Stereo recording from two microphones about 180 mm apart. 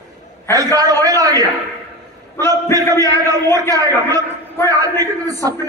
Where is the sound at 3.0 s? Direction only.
20° right (ahead or behind).